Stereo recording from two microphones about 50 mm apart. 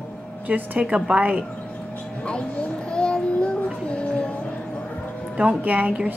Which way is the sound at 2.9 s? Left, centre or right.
Centre.